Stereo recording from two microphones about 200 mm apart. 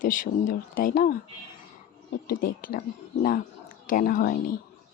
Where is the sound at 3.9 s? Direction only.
45° left (ahead or behind).